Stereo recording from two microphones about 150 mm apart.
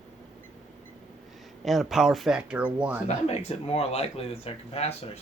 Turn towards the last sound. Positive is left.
turn(degrees=40)  # may be behind; listen again after turning